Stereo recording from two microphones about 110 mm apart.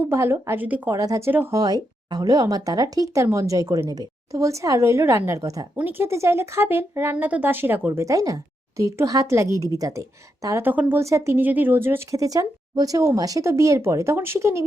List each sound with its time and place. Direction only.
0.1 s speech: 25° right (ahead or behind)
0.9 s speech: 35° right (ahead or behind)
1.3 s speech: 20° right (ahead or behind)
1.5 s speech: 35° right (ahead or behind)
5.7 s speech: 20° right (ahead or behind)
8.0 s speech: 30° right (ahead or behind)
10.7 s speech: 15° right (ahead or behind)
11.0 s speech: 25° right (ahead or behind)